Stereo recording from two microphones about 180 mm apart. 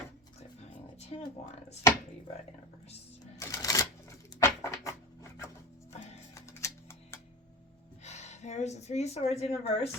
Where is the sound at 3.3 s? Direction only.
20° left (ahead or behind).